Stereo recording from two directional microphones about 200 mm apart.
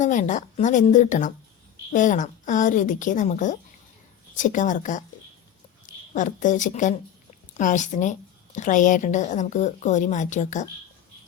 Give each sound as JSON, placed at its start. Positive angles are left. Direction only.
{"t": 0.0, "sound": "a woman's voice", "side_deg": 40}